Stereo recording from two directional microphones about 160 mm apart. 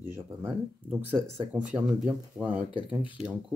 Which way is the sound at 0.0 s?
15° right (ahead or behind).